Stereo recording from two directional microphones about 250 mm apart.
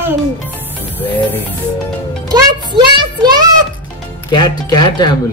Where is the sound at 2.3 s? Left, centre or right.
Centre.